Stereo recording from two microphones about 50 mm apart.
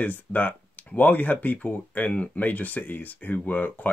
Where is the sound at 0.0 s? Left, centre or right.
Left.